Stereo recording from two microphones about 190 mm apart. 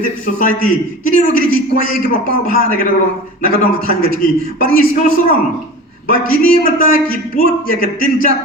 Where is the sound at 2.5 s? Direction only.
50° left (ahead or behind).